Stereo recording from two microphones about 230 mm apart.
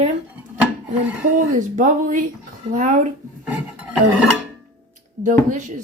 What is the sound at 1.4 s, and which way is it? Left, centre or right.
Speech, right.